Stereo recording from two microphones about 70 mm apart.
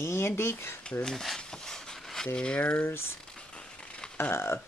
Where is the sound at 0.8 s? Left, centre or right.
Centre.